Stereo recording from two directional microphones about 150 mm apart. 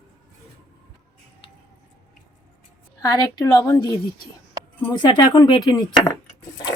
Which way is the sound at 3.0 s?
25° left (ahead or behind).